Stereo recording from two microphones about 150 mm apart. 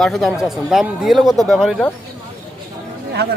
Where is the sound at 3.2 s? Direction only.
90° right.